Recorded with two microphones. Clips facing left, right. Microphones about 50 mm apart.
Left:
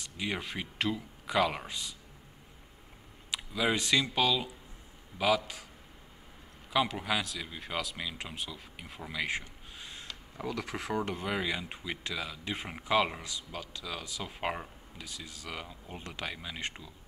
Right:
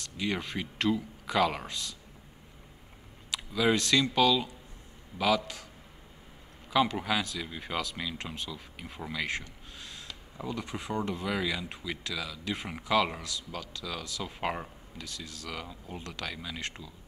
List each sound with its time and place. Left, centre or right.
0.0 s speech: centre
3.3 s speech: centre
6.7 s speech: centre
10.4 s speech: left
11.2 s speech: left
12.5 s speech: centre
12.8 s speech: centre